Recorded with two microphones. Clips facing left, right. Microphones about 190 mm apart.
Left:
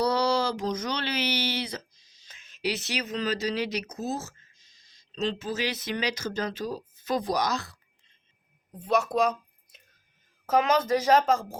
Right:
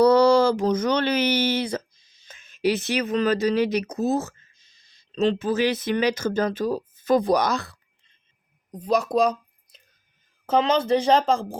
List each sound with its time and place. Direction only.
0.0 s speech: 50° right (ahead or behind)
8.7 s a woman's voice: 35° right (ahead or behind)